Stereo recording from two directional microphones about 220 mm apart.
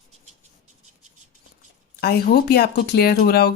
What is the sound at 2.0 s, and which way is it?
Speech, 45° left (ahead or behind).